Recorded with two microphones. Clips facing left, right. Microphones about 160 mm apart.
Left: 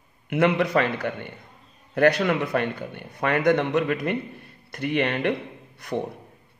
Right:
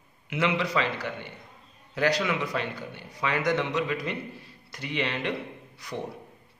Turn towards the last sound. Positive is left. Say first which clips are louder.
# left 7 dB
turn(degrees=60)  # may be behind; listen again after turning